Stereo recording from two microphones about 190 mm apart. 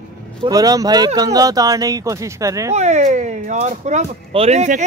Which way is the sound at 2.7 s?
35° right (ahead or behind).